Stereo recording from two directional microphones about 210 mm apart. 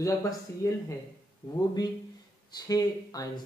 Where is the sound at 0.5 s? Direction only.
10° left (ahead or behind).